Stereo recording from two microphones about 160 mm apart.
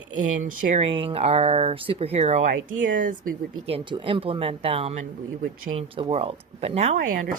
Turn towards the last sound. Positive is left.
turn(degrees=-55)  # may be behind; listen again after turning